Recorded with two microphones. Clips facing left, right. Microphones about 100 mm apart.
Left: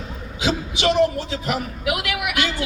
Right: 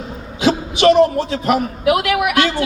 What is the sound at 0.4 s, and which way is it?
A man's voice, 55° right (ahead or behind).